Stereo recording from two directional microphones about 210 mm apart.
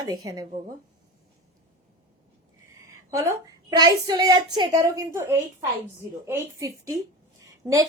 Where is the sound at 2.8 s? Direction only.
15° right (ahead or behind).